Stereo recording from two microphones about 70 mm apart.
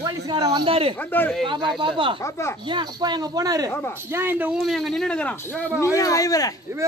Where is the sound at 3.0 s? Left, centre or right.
Right.